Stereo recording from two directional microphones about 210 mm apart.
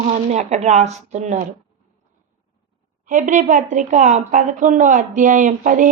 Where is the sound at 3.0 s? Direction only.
40° right (ahead or behind).